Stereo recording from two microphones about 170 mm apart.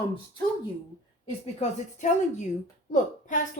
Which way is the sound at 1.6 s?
45° left (ahead or behind).